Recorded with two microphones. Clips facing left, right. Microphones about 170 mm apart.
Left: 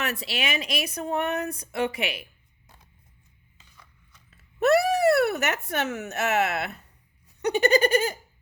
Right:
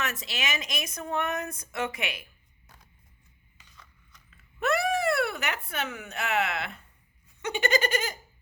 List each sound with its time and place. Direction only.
0.0 s a woman's voice: 35° left (ahead or behind)
4.3 s a sound: 40° left (ahead or behind)
5.1 s a woman's voice: 45° left (ahead or behind)